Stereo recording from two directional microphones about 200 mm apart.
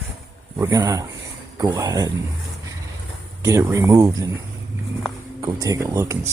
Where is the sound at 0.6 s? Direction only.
20° right (ahead or behind).